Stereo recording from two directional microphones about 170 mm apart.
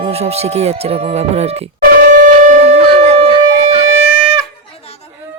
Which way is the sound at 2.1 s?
45° right (ahead or behind).